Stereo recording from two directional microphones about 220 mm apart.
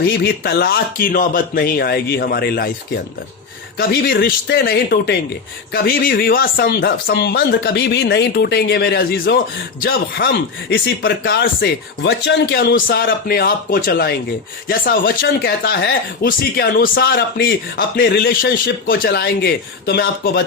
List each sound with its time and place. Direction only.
0.0 s speech: 45° left (ahead or behind)